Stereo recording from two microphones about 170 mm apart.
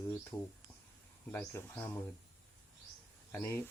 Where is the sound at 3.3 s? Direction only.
10° left (ahead or behind).